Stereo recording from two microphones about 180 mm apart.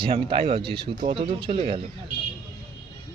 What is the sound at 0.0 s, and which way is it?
Speech, 30° right (ahead or behind).